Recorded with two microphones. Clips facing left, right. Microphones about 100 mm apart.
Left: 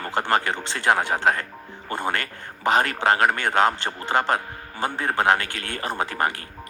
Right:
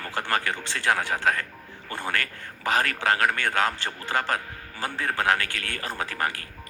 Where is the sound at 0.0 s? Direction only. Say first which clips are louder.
Left 5 dB; 25° left (ahead or behind).